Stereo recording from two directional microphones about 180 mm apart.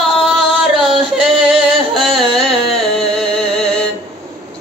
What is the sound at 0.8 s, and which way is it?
Music, 5° right (ahead or behind).